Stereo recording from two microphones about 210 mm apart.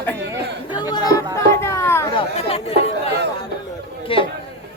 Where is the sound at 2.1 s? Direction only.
25° left (ahead or behind).